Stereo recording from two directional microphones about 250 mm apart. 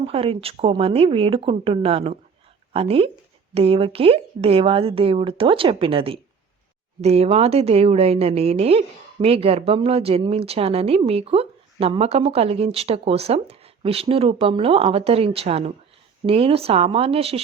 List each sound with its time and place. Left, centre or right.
0.0 s a woman's voice: right